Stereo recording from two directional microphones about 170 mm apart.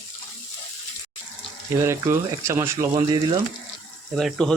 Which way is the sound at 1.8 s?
15° right (ahead or behind).